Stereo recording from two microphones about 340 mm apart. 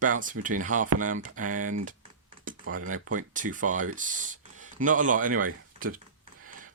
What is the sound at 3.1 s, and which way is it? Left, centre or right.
Speech, right.